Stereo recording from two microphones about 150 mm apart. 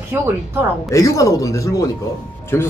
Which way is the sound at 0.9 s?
20° left (ahead or behind).